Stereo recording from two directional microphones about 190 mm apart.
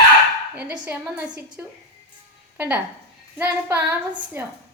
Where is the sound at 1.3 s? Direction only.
20° right (ahead or behind).